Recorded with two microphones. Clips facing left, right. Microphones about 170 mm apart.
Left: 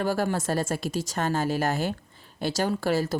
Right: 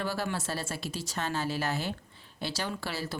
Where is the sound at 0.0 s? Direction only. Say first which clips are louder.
Left 7 dB; 45° left (ahead or behind).